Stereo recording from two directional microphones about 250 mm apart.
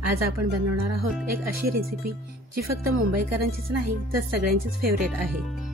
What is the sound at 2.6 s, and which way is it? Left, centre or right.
Speech, right.